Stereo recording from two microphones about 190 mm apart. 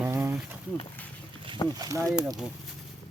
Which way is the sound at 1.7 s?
15° right (ahead or behind).